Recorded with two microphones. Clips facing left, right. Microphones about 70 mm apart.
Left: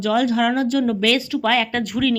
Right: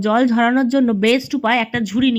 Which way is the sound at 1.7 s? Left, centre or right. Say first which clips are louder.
Right 3 dB; centre.